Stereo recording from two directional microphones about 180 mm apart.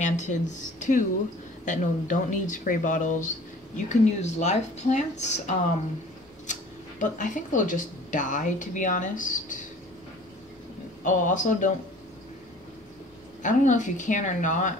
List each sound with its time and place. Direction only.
0.0 s speech: 40° left (ahead or behind)
11.1 s speech: 45° left (ahead or behind)
13.4 s speech: 45° left (ahead or behind)